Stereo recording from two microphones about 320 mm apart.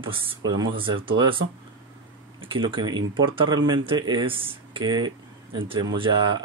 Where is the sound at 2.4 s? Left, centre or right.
Centre.